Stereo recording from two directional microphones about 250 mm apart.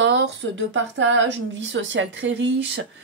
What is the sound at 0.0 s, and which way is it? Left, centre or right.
Speech, right.